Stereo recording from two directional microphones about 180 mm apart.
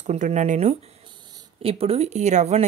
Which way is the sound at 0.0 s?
40° right (ahead or behind).